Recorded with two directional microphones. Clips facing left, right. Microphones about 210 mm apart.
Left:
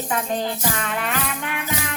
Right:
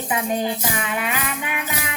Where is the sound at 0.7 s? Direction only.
10° right (ahead or behind).